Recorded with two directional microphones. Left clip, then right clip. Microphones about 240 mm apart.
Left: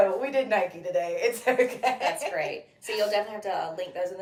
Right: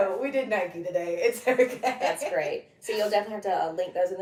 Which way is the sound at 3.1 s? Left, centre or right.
Centre.